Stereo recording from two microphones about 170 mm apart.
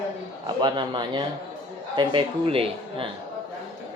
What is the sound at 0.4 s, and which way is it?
A man's voice, 25° right (ahead or behind).